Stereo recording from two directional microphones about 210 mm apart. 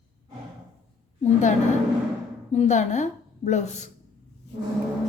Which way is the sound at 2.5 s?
35° left (ahead or behind).